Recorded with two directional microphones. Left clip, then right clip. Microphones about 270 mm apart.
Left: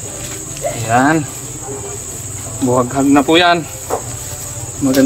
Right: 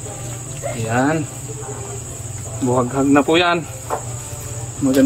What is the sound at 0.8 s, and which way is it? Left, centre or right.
Speech, centre.